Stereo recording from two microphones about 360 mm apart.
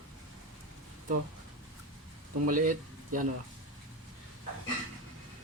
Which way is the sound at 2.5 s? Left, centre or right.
Right.